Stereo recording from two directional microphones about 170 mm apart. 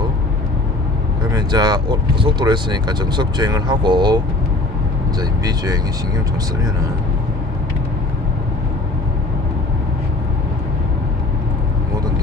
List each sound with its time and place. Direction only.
1.3 s speech: 25° right (ahead or behind)
5.4 s speech: 20° right (ahead or behind)